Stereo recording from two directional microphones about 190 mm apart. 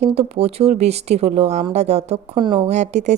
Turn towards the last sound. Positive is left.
turn(degrees=-40)  # may be behind; listen again after turning